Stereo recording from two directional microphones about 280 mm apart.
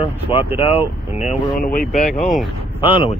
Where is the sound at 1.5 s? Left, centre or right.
Left.